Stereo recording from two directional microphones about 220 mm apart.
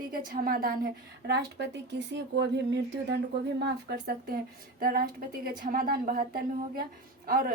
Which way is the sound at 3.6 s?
45° right (ahead or behind).